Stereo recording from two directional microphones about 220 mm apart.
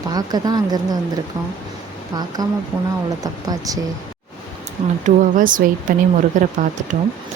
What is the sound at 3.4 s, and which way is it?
Speech, 15° right (ahead or behind).